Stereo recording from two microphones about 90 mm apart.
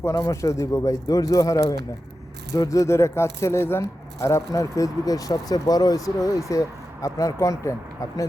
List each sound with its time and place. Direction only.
0.0 s speech: 30° left (ahead or behind)